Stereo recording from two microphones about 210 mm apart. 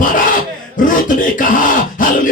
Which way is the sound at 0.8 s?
40° left (ahead or behind).